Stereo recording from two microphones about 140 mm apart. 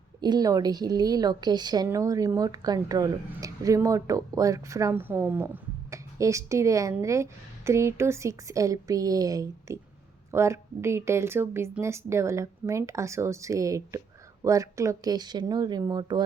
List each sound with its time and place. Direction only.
0.2 s a woman's voice: 30° right (ahead or behind)